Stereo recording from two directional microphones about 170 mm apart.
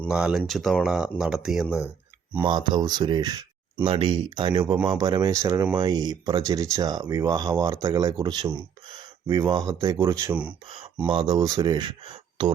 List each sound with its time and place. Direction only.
0.1 s speech: 5° right (ahead or behind)
2.4 s speech: 25° right (ahead or behind)